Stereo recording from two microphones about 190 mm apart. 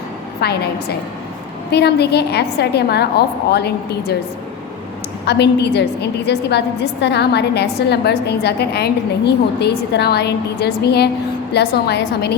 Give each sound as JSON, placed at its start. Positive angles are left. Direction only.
{"t": 0.4, "sound": "a woman's voice", "side_deg": 60}
{"t": 5.2, "sound": "a woman's voice", "side_deg": 60}